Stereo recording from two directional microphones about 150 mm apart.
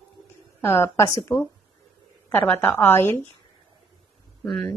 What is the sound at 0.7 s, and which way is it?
A woman's voice, 20° left (ahead or behind).